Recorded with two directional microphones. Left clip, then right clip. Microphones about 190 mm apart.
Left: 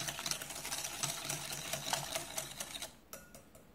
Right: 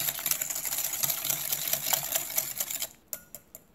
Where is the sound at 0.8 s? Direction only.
5° right (ahead or behind).